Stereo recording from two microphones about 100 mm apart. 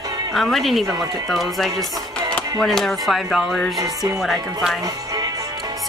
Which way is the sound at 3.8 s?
35° right (ahead or behind).